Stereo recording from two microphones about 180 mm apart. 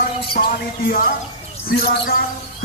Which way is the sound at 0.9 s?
55° left (ahead or behind).